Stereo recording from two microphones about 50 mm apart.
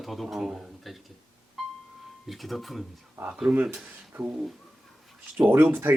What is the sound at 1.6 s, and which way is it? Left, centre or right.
Music, centre.